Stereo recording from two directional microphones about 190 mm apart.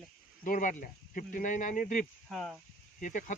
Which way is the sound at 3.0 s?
40° left (ahead or behind).